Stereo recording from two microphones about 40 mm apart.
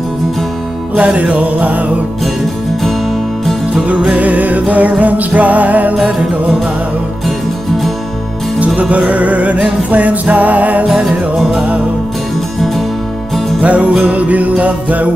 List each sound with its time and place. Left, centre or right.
0.9 s music: right
3.7 s music: right
7.2 s music: centre
8.7 s music: right
12.5 s music: centre
13.6 s music: right